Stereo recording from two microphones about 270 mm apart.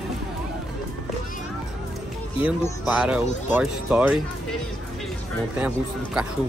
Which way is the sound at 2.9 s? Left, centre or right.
Centre.